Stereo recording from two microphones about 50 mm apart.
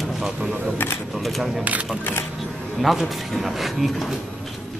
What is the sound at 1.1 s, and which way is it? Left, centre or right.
A man's voice, centre.